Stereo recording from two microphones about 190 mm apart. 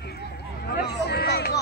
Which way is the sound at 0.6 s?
55° left (ahead or behind).